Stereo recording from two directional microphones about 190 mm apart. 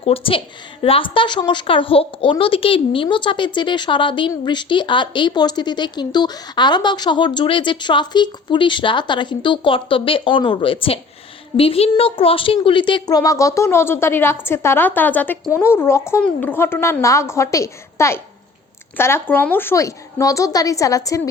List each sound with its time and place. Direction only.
0.0 s a woman's voice: 30° left (ahead or behind)